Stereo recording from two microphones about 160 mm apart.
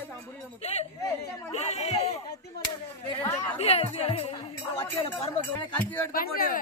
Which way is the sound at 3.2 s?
10° left (ahead or behind).